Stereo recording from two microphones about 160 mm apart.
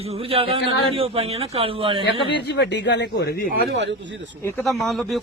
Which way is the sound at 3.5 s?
90° right.